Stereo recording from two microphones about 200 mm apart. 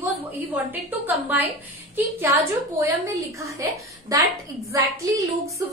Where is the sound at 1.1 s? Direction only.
10° right (ahead or behind).